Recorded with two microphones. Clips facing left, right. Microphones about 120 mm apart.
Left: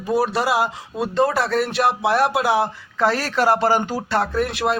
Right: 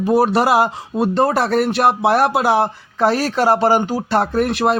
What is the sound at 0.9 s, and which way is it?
Speech, 40° right (ahead or behind).